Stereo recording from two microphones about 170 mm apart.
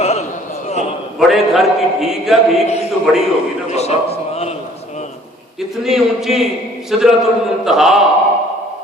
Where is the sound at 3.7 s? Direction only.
40° left (ahead or behind).